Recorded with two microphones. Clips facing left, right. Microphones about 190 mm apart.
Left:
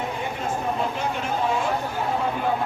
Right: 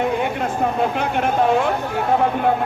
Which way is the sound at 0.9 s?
60° right (ahead or behind).